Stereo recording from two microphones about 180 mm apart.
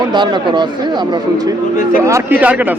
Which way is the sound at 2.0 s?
15° right (ahead or behind).